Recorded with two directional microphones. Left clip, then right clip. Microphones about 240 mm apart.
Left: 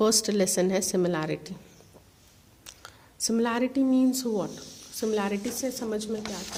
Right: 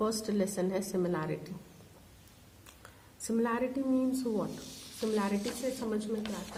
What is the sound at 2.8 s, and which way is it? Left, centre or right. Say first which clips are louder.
A woman's voice: left 10 dB; left.